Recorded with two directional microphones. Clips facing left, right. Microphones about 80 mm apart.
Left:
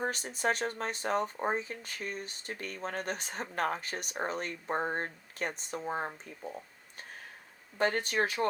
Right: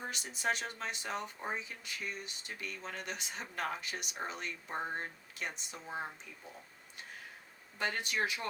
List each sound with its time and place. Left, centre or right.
0.0 s speech: left
7.8 s speech: left